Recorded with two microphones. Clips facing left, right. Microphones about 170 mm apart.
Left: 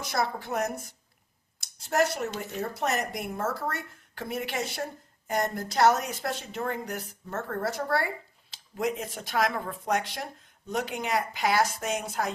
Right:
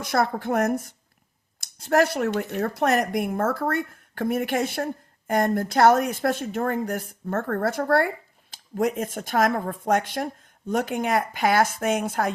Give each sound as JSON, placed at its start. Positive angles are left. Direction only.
{"t": 0.0, "sound": "speech", "side_deg": -55}